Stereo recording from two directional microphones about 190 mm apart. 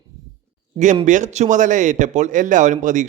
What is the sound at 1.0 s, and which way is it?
A man's voice, 40° right (ahead or behind).